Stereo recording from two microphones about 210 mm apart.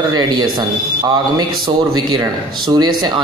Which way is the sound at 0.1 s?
20° right (ahead or behind).